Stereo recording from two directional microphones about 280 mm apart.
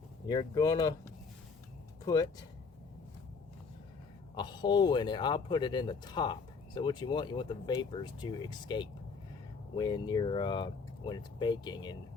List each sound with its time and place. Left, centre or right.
0.3 s speech: centre
4.4 s speech: centre